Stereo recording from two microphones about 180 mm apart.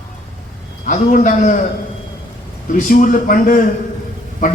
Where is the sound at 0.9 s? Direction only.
45° left (ahead or behind).